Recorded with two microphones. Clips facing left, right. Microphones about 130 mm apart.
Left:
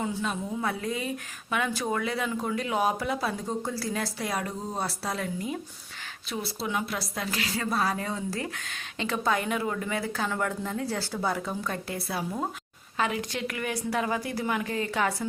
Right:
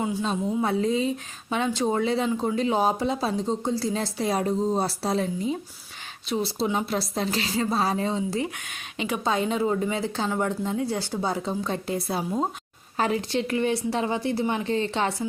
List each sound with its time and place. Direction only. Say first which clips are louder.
0.0 s a woman's voice: right 3 dB; 15° right (ahead or behind)
0.3 s a woman's voice: right 5 dB; 25° right (ahead or behind)
13.0 s a woman's voice: right 4 dB; 35° right (ahead or behind)